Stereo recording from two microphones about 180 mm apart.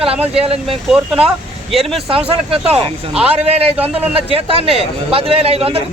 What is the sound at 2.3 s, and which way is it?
A man's voice, 35° right (ahead or behind).